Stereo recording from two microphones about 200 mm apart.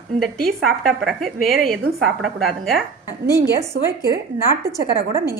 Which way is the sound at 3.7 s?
50° right (ahead or behind).